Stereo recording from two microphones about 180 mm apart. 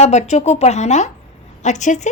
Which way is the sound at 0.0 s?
40° left (ahead or behind).